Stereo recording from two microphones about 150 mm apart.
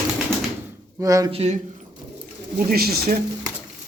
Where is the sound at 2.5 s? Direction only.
90° right.